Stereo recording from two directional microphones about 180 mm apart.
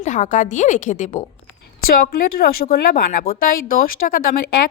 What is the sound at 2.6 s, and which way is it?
Speech, 55° left (ahead or behind).